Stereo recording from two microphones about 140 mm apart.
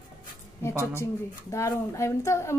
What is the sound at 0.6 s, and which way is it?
A woman's voice, 20° left (ahead or behind).